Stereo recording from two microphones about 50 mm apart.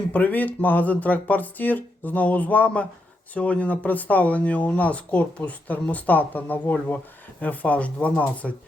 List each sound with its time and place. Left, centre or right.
0.1 s speech: left